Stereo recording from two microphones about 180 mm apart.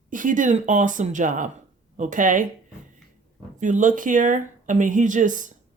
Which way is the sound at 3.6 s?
45° right (ahead or behind).